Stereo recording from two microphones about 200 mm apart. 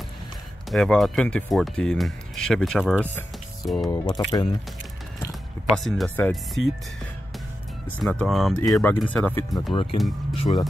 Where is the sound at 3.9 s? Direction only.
20° left (ahead or behind).